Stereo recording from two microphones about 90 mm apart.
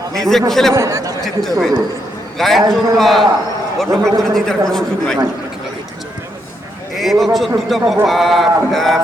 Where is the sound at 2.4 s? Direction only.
Centre (ahead or behind).